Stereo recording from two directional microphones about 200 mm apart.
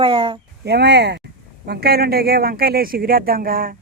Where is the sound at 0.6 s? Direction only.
55° right (ahead or behind).